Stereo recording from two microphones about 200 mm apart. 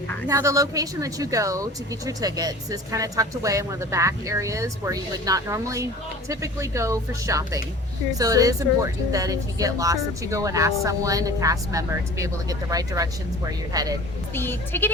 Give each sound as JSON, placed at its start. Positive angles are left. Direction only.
{"t": 0.3, "sound": "a woman's voice", "side_deg": -15}
{"t": 14.3, "sound": "speech", "side_deg": 10}